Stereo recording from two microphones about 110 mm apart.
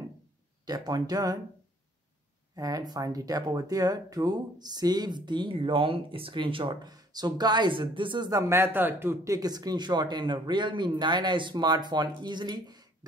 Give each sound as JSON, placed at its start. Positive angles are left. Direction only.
{"t": 0.7, "sound": "speech", "side_deg": -35}
{"t": 2.5, "sound": "speech", "side_deg": -35}
{"t": 8.3, "sound": "speech", "side_deg": -30}
{"t": 8.5, "sound": "speech", "side_deg": -20}